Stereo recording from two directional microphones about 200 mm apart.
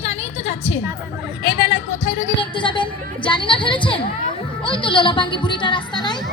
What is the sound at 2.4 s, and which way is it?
A woman's voice, 25° left (ahead or behind).